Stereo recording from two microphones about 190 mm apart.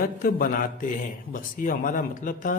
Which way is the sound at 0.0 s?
50° left (ahead or behind).